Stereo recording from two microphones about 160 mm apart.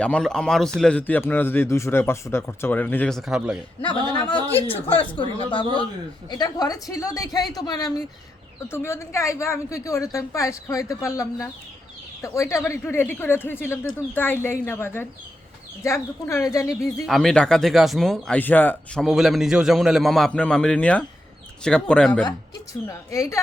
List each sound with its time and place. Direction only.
0.0 s a man's voice: 5° left (ahead or behind)
3.2 s speech: 5° right (ahead or behind)
4.1 s a woman's voice: 30° left (ahead or behind)
17.1 s speech: 5° left (ahead or behind)
19.0 s a man's voice: centre (ahead or behind)
22.9 s a woman's voice: 20° left (ahead or behind)